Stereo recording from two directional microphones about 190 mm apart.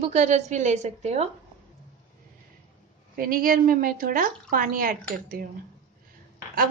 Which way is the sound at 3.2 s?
50° right (ahead or behind).